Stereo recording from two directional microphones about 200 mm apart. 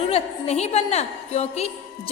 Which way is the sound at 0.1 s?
30° left (ahead or behind).